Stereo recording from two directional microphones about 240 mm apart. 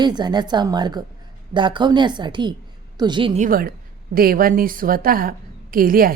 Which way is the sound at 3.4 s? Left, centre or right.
Right.